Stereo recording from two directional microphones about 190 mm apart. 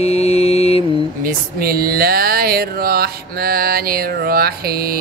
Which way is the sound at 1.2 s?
50° right (ahead or behind).